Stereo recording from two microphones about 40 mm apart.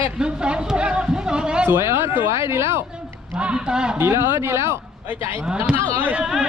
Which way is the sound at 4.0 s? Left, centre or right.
Right.